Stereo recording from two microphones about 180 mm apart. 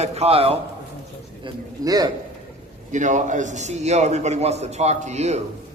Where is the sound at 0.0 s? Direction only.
35° right (ahead or behind).